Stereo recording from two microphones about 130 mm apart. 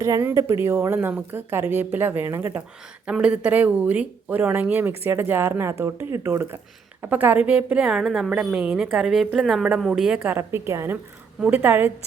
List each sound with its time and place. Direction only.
0.0 s speech: 20° right (ahead or behind)
3.1 s a woman's voice: 5° right (ahead or behind)
10.3 s a woman's voice: 20° right (ahead or behind)